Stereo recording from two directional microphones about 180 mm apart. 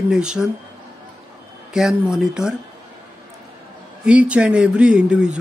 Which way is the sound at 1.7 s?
5° right (ahead or behind).